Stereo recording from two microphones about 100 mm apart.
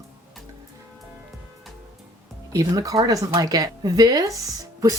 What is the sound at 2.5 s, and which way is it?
Speech, 35° right (ahead or behind).